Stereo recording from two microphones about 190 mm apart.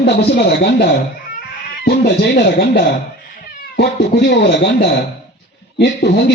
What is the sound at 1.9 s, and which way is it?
Speech, 60° left (ahead or behind).